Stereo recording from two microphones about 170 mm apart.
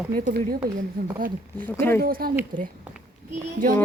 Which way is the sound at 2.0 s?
60° right (ahead or behind).